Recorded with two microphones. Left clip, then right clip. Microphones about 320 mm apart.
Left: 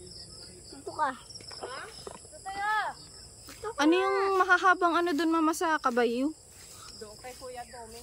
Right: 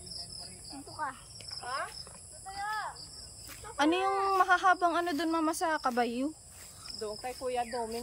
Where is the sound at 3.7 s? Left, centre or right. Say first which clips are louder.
Left 3 dB; centre.